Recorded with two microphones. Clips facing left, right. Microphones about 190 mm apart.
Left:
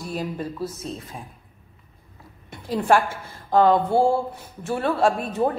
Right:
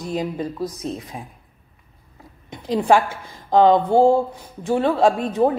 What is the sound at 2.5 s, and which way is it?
A woman's voice, 15° right (ahead or behind).